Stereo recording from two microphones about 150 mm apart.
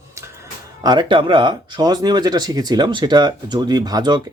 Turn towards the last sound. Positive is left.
turn(degrees=-30)  # may be behind; listen again after turning